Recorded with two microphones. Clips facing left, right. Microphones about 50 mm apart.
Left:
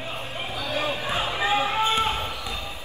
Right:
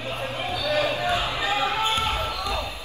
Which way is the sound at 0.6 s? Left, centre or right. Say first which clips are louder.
Right 4 dB; right.